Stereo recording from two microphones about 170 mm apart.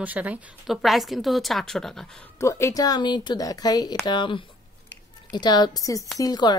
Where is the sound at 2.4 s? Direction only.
20° left (ahead or behind).